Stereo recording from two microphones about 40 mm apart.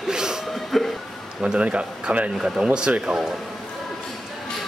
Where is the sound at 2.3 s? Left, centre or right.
Centre.